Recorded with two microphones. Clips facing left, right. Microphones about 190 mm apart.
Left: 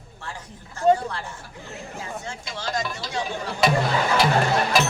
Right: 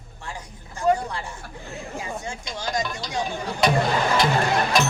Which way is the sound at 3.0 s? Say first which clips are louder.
Right 1 dB; centre (ahead or behind).